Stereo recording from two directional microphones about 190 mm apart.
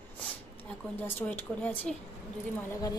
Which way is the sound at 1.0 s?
10° left (ahead or behind).